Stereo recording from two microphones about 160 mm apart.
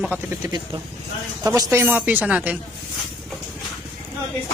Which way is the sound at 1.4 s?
20° right (ahead or behind).